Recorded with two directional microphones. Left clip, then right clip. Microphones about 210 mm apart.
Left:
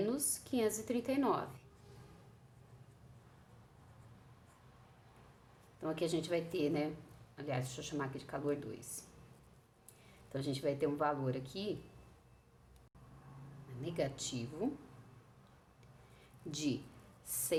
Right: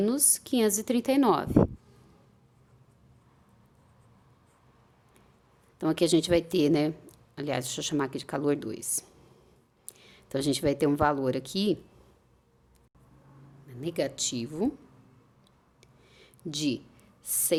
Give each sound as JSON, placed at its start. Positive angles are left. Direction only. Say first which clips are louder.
{"t": 0.0, "sound": "speech", "louder": "right 10 dB", "side_deg": -45}
{"t": 5.8, "sound": "speech", "louder": "right 12 dB", "side_deg": -50}
{"t": 13.8, "sound": "speech", "louder": "right 9 dB", "side_deg": -40}
{"t": 16.1, "sound": "a sound", "louder": "right 10 dB", "side_deg": -40}
{"t": 17.2, "sound": "a woman's voice", "louder": "right 8 dB", "side_deg": -35}